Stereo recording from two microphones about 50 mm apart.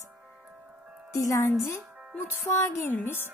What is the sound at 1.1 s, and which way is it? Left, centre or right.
Speech, left.